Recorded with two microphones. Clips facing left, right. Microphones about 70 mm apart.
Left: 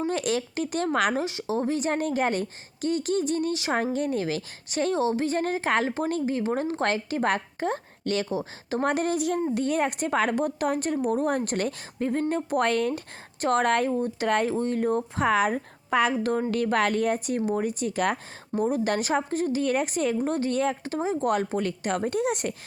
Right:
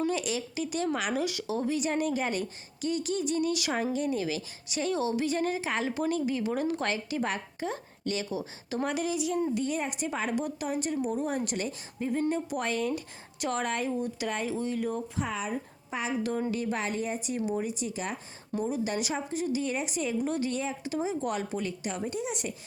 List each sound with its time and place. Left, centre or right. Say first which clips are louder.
0.1 s speech: left 4 dB; left
1.2 s speech: left 3 dB; left
8.3 s speech: left 5 dB; left
8.8 s speech: left 5 dB; left
14.3 s speech: left 9 dB; left
16.1 s speech: left 5 dB; left